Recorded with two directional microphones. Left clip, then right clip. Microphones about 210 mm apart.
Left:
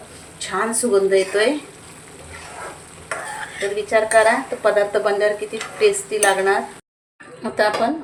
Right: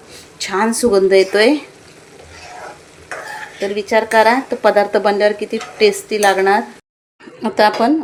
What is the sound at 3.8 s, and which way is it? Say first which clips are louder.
A woman's voice: right 3 dB; 45° right (ahead or behind).